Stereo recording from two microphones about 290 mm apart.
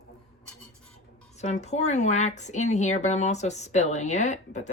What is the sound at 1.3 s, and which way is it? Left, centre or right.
A woman's voice, left.